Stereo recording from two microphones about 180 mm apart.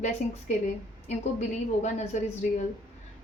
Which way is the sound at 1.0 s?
40° left (ahead or behind).